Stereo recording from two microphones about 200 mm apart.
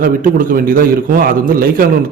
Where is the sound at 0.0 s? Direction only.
45° right (ahead or behind).